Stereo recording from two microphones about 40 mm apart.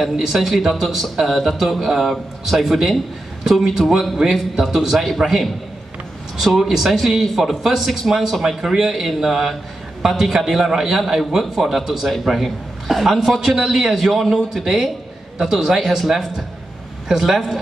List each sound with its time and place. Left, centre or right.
0.1 s speech: centre
0.4 s a man's voice: centre